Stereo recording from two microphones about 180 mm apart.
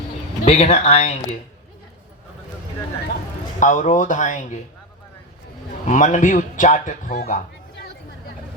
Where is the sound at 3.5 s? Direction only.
45° left (ahead or behind).